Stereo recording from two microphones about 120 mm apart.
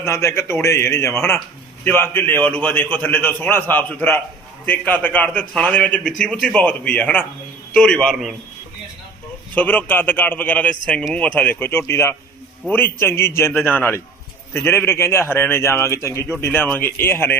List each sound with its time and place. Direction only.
0.0 s a man's voice: 20° left (ahead or behind); by 8.4 s 5° left (ahead or behind)
9.6 s a man's voice: 15° left (ahead or behind)